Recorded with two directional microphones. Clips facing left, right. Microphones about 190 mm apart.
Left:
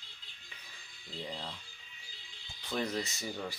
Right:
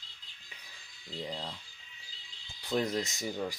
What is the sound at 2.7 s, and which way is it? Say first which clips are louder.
Speech: right 4 dB; 20° right (ahead or behind).